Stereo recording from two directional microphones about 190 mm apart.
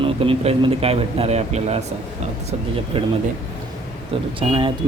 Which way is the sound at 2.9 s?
30° right (ahead or behind).